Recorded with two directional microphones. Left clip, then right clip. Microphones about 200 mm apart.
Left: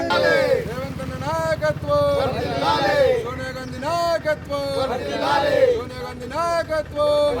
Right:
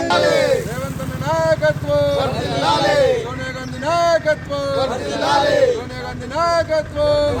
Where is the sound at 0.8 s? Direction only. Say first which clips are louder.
Right 3 dB; 15° left (ahead or behind).